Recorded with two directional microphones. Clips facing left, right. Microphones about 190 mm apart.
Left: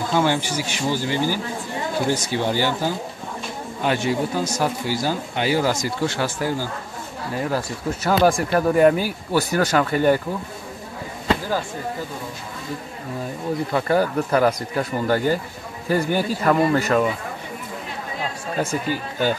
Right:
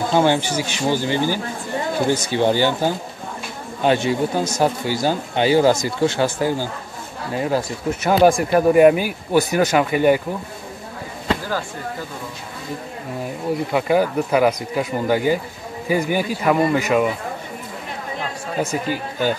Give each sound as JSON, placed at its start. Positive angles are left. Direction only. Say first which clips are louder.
{"t": 0.1, "sound": "speech", "louder": "right 3 dB", "side_deg": -25}
{"t": 13.7, "sound": "speech", "louder": "right 2 dB", "side_deg": -10}
{"t": 18.6, "sound": "speech", "louder": "right 1 dB", "side_deg": -15}